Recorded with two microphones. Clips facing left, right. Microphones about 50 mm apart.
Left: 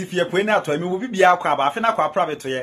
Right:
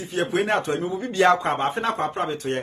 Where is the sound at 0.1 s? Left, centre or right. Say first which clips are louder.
Left 4 dB; left.